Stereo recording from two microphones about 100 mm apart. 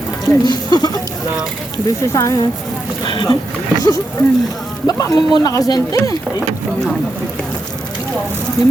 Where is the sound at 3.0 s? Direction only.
55° left (ahead or behind).